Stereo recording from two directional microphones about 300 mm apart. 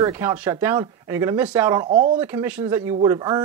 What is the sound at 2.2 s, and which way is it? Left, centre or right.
Speech, centre.